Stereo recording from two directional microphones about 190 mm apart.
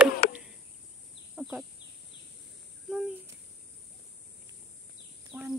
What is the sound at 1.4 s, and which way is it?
Speech, 5° right (ahead or behind).